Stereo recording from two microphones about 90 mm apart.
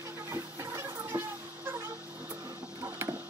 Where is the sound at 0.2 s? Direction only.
30° right (ahead or behind).